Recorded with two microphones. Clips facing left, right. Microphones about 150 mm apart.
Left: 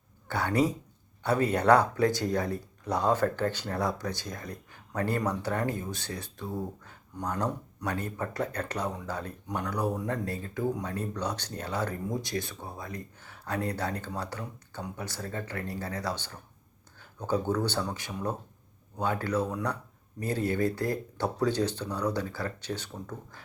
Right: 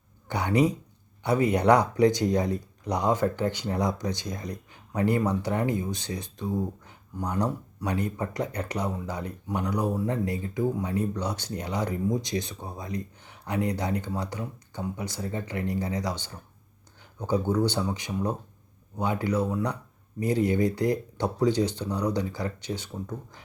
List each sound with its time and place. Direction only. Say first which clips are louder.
0.3 s speech: right 3 dB; 15° right (ahead or behind)